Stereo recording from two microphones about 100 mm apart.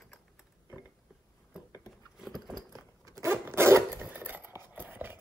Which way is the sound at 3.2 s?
25° right (ahead or behind).